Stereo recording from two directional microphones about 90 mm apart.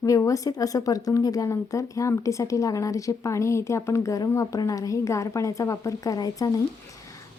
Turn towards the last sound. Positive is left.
turn(degrees=45)  # may be behind; listen again after turning